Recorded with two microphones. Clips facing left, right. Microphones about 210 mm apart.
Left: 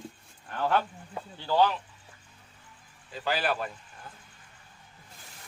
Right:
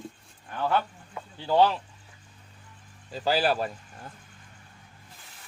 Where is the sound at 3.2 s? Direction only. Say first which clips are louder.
Right 4 dB; 35° right (ahead or behind).